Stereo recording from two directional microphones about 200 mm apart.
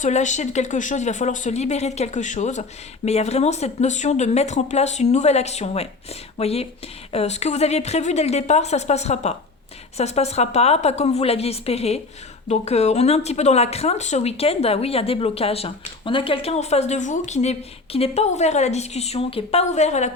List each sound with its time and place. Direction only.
0.0 s speech: 35° left (ahead or behind)